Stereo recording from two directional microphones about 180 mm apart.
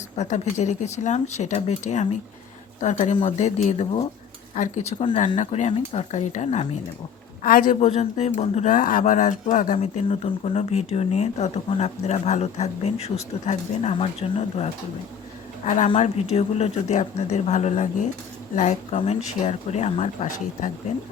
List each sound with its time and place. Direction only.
0.2 s speech: 40° left (ahead or behind)
7.4 s speech: 50° left (ahead or behind)
7.8 s speech: 35° left (ahead or behind)
9.7 s speech: 35° left (ahead or behind)